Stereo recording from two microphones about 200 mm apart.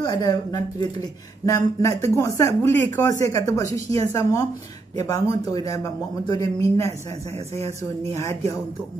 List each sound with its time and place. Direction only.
0.0 s speech: 20° left (ahead or behind)